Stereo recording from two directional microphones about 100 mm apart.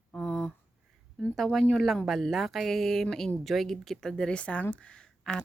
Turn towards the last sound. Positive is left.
turn(degrees=10)  # may be behind; listen again after turning